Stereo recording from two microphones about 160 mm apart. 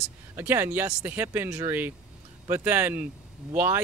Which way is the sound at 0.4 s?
15° right (ahead or behind).